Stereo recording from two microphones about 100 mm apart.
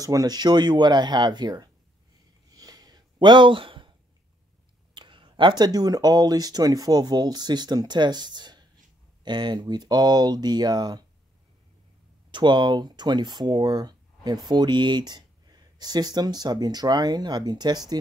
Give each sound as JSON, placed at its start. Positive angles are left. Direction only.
{"t": 0.0, "sound": "speech", "side_deg": -35}
{"t": 2.5, "sound": "a sound", "side_deg": -40}
{"t": 4.9, "sound": "speech", "side_deg": -55}
{"t": 12.3, "sound": "speech", "side_deg": -50}